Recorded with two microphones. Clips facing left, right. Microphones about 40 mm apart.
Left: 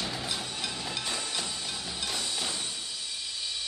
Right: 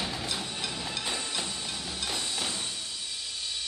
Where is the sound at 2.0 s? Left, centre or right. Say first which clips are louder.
Right 1 dB; centre.